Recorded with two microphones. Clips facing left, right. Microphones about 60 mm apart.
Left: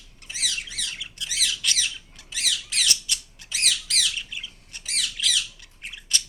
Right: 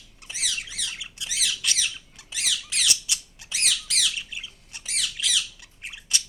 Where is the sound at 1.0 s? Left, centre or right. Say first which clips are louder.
Left 4 dB; centre.